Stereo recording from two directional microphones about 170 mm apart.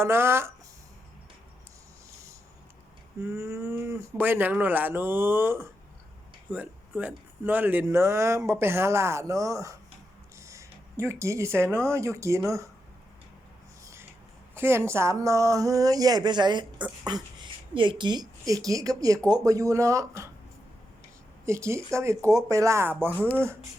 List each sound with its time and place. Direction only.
0.0 s speech: 15° right (ahead or behind)
3.2 s speech: 15° right (ahead or behind)
14.5 s a woman's voice: 15° right (ahead or behind)
21.4 s speech: 15° right (ahead or behind)